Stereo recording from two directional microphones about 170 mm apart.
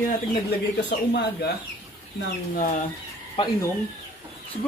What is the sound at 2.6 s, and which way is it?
Speech, 50° left (ahead or behind).